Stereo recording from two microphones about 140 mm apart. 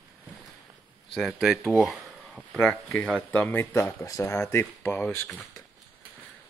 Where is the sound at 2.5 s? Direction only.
10° left (ahead or behind).